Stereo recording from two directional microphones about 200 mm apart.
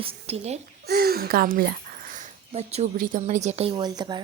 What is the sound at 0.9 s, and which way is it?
Speech, 50° right (ahead or behind).